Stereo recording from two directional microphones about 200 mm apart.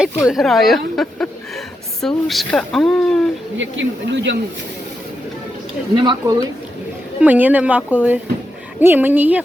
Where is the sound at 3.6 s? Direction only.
65° right (ahead or behind).